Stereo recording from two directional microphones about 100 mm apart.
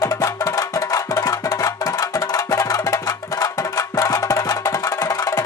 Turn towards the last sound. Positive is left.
turn(degrees=35)  # may be behind; listen again after turning